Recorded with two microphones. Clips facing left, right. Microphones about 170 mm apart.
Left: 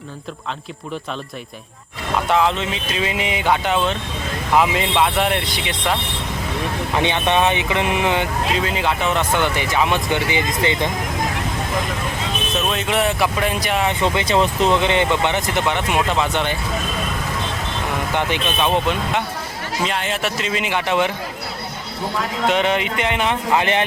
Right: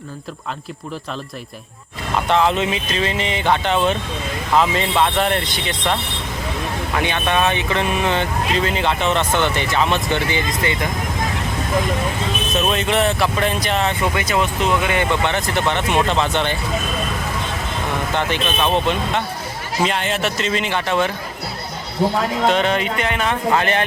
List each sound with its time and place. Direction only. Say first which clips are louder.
2.2 s speech: right 2 dB; 5° left (ahead or behind)
6.9 s speech: left 2 dB; 20° left (ahead or behind)
12.6 s speech: right 2 dB; centre (ahead or behind)
14.0 s speech: left 2 dB; 25° left (ahead or behind)
18.1 s speech: even; 15° left (ahead or behind)
22.4 s speech: left 1 dB; 15° left (ahead or behind)